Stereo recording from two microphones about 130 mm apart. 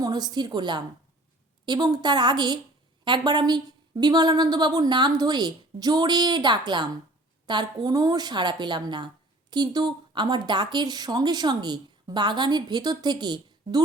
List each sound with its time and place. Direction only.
0.0 s a woman's voice: 30° right (ahead or behind)